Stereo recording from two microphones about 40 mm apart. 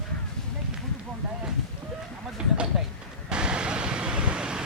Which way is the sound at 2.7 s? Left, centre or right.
Centre.